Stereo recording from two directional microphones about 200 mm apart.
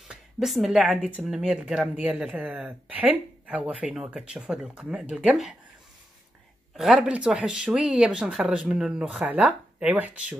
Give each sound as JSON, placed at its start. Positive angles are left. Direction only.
{"t": 0.1, "sound": "a woman's voice", "side_deg": 0}
{"t": 6.8, "sound": "a woman's voice", "side_deg": -5}